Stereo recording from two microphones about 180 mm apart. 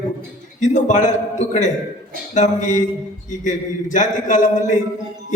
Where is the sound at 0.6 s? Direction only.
45° left (ahead or behind).